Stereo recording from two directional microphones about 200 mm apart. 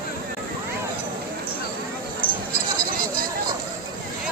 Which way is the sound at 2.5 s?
45° right (ahead or behind).